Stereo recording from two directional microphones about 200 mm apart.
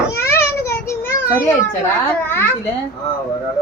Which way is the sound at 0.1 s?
10° left (ahead or behind).